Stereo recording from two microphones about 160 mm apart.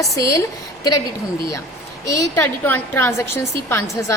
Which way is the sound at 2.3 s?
10° left (ahead or behind).